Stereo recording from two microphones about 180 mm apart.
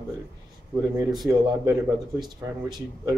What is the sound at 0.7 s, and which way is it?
Speech, 20° right (ahead or behind).